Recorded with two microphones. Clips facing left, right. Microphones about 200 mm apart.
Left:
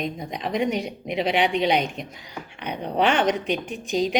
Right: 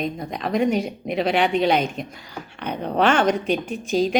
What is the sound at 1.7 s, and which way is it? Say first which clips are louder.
Speech: right 2 dB; 15° left (ahead or behind).